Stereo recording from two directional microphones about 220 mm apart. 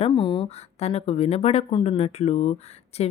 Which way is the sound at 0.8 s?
30° left (ahead or behind).